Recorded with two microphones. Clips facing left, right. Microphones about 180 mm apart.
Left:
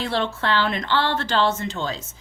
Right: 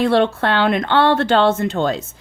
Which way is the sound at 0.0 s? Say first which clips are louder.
Right 9 dB; 60° right (ahead or behind).